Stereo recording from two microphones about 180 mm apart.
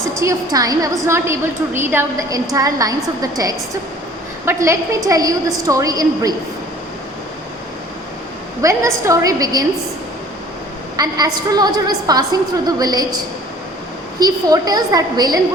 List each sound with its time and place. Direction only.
0.1 s a woman's voice: 15° right (ahead or behind)
8.6 s a woman's voice: 20° right (ahead or behind)
10.9 s a woman's voice: 20° right (ahead or behind)
14.2 s a woman's voice: 20° right (ahead or behind)